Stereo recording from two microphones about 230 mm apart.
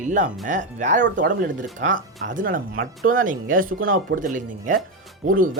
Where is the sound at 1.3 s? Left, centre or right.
Right.